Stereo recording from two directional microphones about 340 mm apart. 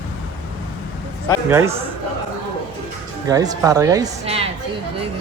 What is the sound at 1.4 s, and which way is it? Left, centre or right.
Speech, centre.